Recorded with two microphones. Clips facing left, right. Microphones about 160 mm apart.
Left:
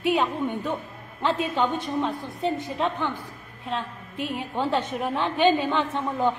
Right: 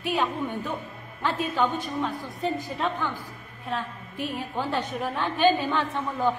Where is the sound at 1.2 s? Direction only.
25° left (ahead or behind).